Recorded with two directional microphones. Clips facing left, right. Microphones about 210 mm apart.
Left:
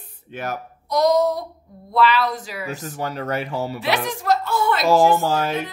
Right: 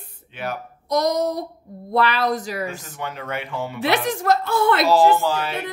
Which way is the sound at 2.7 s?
40° left (ahead or behind).